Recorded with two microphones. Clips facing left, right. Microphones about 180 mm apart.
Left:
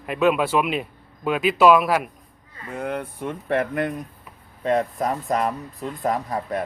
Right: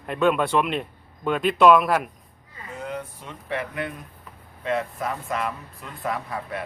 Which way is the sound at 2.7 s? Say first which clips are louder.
Left 5 dB; 60° left (ahead or behind).